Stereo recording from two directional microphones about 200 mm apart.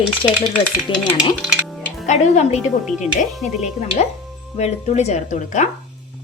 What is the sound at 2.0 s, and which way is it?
Speech, 35° left (ahead or behind).